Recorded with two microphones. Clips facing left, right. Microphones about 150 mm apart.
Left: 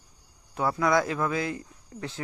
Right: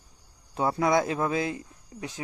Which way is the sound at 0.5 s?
25° right (ahead or behind).